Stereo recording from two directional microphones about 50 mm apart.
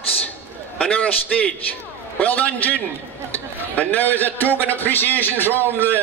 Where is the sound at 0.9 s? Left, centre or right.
Left.